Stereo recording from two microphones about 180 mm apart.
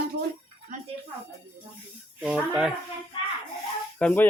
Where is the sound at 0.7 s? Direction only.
45° right (ahead or behind).